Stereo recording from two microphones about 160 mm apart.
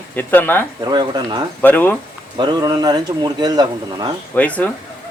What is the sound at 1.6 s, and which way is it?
Speech, 10° left (ahead or behind).